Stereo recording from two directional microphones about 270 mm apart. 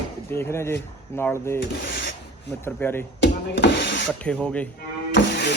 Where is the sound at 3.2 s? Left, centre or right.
Left.